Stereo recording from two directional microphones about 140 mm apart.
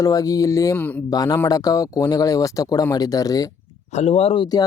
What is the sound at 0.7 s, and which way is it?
Speech, 10° left (ahead or behind).